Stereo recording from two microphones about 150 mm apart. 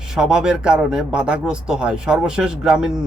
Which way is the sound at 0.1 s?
5° right (ahead or behind).